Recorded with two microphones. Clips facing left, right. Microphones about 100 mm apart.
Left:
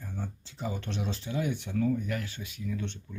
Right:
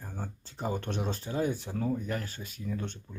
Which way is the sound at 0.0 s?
45° right (ahead or behind).